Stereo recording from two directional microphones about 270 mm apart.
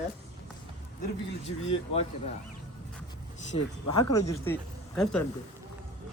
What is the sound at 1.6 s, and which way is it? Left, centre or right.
Speech, left.